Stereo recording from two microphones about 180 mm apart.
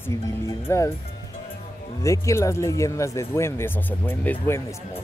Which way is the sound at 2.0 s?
15° left (ahead or behind).